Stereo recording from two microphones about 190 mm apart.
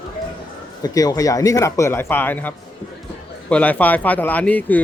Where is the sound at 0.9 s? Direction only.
20° left (ahead or behind).